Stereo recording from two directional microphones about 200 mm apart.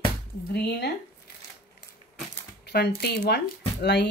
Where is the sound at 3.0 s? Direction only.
55° left (ahead or behind).